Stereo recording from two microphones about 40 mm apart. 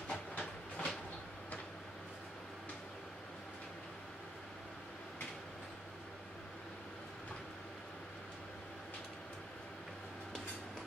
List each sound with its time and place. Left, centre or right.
0.1 s train: centre